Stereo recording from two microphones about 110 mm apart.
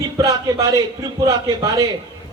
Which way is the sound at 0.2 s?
35° right (ahead or behind).